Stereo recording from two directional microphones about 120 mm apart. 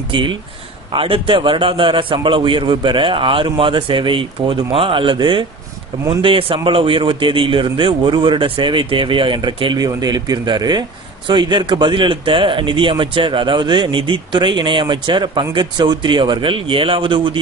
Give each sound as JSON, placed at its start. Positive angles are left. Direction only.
{"t": 0.1, "sound": "a man's voice", "side_deg": -45}